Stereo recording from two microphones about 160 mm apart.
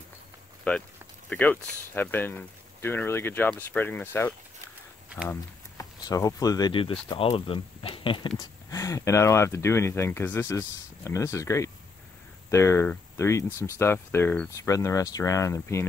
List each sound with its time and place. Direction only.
0.7 s speech: 10° left (ahead or behind); by 8.3 s 35° left (ahead or behind)
8.4 s speech: 20° left (ahead or behind)